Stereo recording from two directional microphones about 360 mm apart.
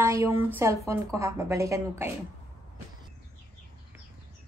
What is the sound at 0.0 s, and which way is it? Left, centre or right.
A woman's voice, centre.